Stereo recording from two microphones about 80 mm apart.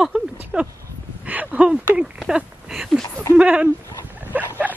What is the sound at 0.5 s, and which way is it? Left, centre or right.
Speech, centre.